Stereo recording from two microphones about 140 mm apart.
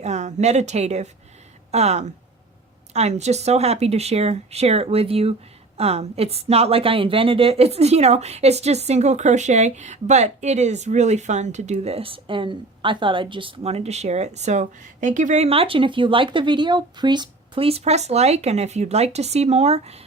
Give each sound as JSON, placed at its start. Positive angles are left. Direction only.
{"t": 0.0, "sound": "a woman's voice", "side_deg": -55}